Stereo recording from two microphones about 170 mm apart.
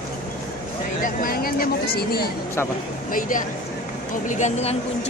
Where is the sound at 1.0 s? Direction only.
60° left (ahead or behind).